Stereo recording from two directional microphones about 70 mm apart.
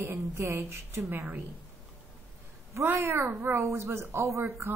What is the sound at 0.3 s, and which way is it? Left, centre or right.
Speech, right.